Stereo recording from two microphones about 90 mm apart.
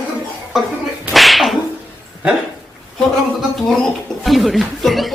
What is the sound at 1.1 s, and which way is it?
Whip, centre (ahead or behind).